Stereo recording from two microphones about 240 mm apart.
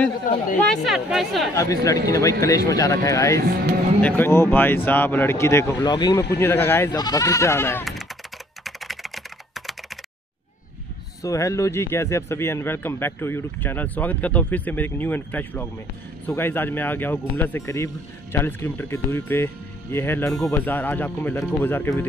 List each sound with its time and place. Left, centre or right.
0.3 s speech: left
0.7 s speech: centre
1.5 s speech: centre
3.4 s speech: right
4.2 s speech: centre
8.6 s typing: centre
11.2 s speech: centre